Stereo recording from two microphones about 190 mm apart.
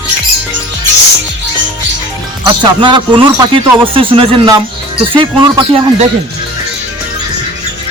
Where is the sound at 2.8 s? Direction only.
25° right (ahead or behind).